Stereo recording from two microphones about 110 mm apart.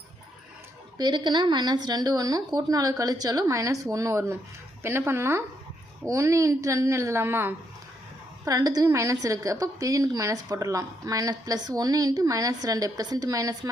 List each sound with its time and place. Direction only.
0.9 s a woman's voice: 40° right (ahead or behind); by 7.5 s 20° right (ahead or behind)
8.4 s a woman's voice: 35° right (ahead or behind)